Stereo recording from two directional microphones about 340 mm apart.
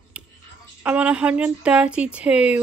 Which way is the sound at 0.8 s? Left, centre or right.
Centre.